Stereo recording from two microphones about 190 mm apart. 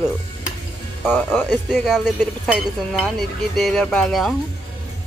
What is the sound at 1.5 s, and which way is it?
Speech, centre (ahead or behind).